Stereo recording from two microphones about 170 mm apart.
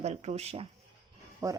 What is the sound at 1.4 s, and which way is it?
Speech, 15° right (ahead or behind).